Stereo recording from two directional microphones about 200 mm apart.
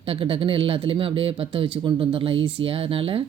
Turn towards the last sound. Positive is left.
turn(degrees=-25)  # may be behind; listen again after turning